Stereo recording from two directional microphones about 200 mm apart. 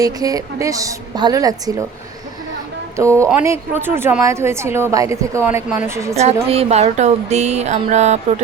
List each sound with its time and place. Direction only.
0.0 s a woman's voice: 20° right (ahead or behind)
2.9 s a woman's voice: 15° right (ahead or behind)
6.1 s speech: 30° right (ahead or behind)